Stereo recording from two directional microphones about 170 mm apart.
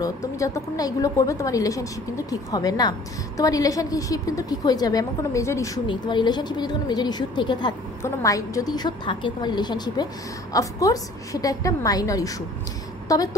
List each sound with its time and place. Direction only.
0.0 s a woman's voice: 20° left (ahead or behind)